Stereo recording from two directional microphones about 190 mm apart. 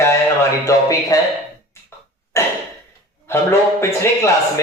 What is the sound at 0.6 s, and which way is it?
Speech, 15° left (ahead or behind).